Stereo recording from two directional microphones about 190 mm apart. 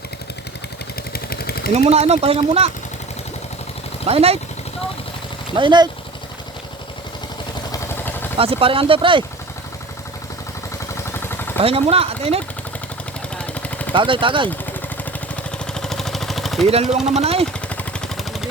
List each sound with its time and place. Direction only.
1.1 s vehicle: 55° left (ahead or behind)
1.7 s speech: 35° right (ahead or behind)
4.0 s speech: 30° right (ahead or behind)
5.5 s speech: 25° right (ahead or behind)
7.7 s vehicle: 10° left (ahead or behind)
8.4 s speech: 30° right (ahead or behind)
11.1 s a sound: 10° left (ahead or behind)
11.6 s speech: 30° right (ahead or behind)
13.3 s vehicle: 5° left (ahead or behind)
13.9 s speech: 25° right (ahead or behind)
15.5 s vehicle: 5° left (ahead or behind)
16.6 s speech: 35° right (ahead or behind)
17.7 s vehicle: 5° left (ahead or behind)